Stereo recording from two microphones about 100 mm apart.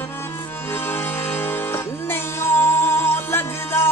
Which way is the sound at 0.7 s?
20° left (ahead or behind).